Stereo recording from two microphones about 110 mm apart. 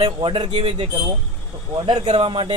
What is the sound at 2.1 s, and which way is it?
Speech, 50° right (ahead or behind).